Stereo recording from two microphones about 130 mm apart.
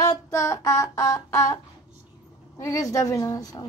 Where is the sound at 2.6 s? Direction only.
25° left (ahead or behind).